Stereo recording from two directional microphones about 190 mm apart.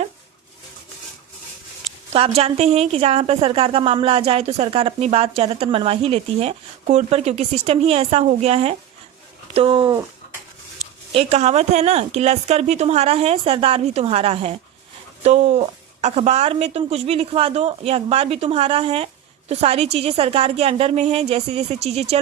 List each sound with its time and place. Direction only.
2.1 s a woman's voice: 30° right (ahead or behind)
11.1 s a woman's voice: 30° right (ahead or behind)